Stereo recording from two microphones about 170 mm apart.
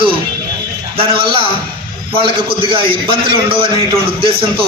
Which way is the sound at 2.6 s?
30° right (ahead or behind).